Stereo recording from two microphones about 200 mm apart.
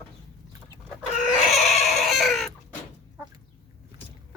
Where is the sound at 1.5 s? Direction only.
Centre (ahead or behind).